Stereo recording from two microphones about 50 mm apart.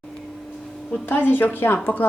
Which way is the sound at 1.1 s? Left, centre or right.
Left.